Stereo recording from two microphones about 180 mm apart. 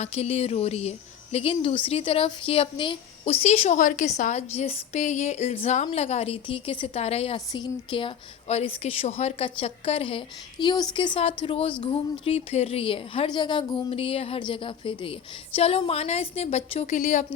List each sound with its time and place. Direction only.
0.0 s a woman's voice: 35° left (ahead or behind)